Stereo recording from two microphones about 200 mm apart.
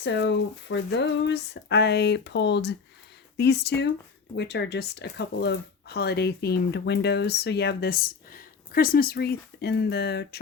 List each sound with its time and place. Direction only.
0.0 s speech: 60° left (ahead or behind)